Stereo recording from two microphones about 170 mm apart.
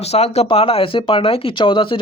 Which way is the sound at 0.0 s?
40° left (ahead or behind).